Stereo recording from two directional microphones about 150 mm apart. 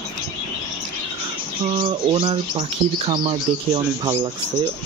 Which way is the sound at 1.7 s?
35° right (ahead or behind).